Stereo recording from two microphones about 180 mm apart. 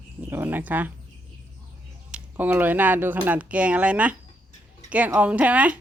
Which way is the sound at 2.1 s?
10° right (ahead or behind).